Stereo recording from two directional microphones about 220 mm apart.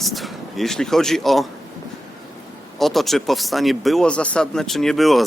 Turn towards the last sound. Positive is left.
turn(degrees=0)  # may be behind; listen again after turning